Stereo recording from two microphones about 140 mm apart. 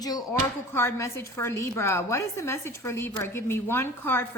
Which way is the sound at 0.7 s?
15° left (ahead or behind).